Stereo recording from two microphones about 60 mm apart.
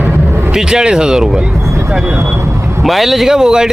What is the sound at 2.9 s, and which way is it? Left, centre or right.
Speech, centre.